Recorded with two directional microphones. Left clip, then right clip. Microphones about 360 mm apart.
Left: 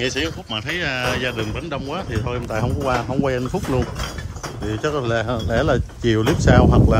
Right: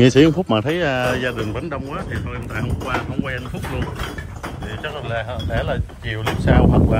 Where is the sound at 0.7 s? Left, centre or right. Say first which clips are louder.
Right 3 dB; centre.